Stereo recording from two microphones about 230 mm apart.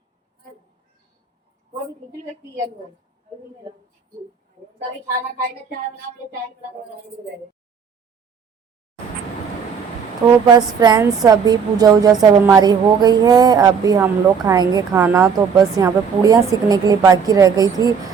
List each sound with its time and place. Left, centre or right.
10.4 s a woman's voice: centre